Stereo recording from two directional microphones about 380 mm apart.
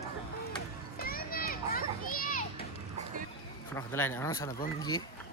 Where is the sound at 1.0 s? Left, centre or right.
Left.